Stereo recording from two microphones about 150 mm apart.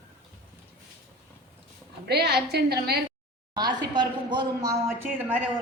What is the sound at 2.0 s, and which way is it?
Speech, 90° right.